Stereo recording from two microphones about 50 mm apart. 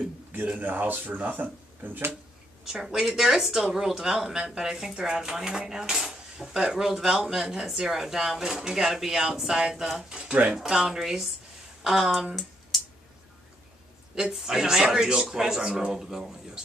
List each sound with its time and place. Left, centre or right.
0.6 s speech: right
2.6 s speech: centre
12.7 s a sound: centre
14.3 s speech: centre